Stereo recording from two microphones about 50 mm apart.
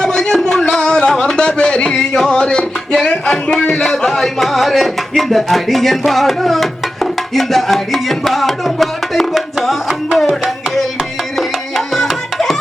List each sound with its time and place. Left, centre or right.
0.0 s music: centre
1.2 s a sound: centre
3.1 s speech: centre
3.8 s music: centre
11.3 s music: centre